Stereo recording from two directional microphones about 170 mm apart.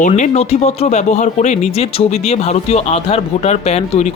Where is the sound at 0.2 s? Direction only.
40° left (ahead or behind).